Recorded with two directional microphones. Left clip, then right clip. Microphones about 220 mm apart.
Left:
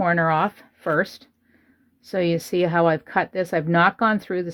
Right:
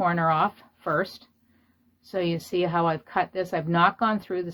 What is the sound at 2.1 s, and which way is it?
Speech, 40° left (ahead or behind).